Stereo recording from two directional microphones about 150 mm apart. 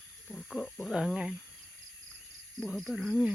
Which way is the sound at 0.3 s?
5° left (ahead or behind).